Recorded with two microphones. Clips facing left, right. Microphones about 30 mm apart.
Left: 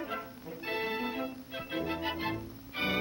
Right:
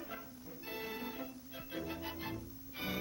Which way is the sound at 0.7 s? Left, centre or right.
Left.